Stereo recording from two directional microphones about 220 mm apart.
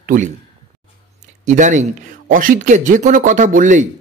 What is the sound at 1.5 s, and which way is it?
Speech, 35° right (ahead or behind).